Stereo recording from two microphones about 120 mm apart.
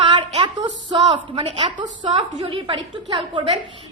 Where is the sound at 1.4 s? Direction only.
55° right (ahead or behind).